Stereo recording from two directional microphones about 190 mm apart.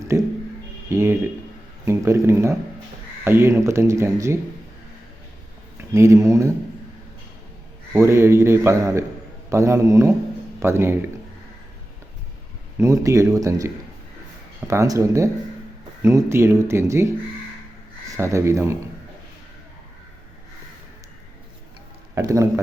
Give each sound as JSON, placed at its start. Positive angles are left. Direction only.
{"t": 0.1, "sound": "a man's voice", "side_deg": -15}
{"t": 5.7, "sound": "speech", "side_deg": -15}
{"t": 7.9, "sound": "a man's voice", "side_deg": -15}
{"t": 12.7, "sound": "a man's voice", "side_deg": -15}
{"t": 14.7, "sound": "a man's voice", "side_deg": -15}
{"t": 18.2, "sound": "a man's voice", "side_deg": -15}
{"t": 22.1, "sound": "a man's voice", "side_deg": -15}